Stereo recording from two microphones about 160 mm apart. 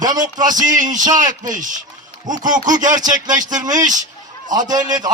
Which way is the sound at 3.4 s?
25° right (ahead or behind).